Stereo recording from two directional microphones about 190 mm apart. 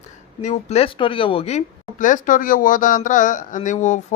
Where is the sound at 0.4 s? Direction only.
35° left (ahead or behind).